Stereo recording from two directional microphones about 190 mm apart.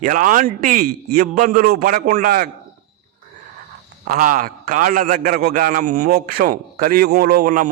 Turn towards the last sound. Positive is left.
turn(degrees=-45)  # may be behind; listen again after turning